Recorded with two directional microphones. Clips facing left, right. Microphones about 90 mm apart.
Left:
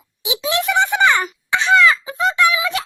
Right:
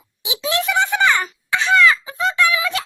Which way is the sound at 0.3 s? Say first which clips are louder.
Left 2 dB; 20° left (ahead or behind).